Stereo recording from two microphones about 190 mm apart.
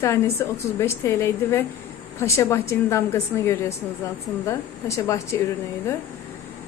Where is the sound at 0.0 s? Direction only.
15° left (ahead or behind).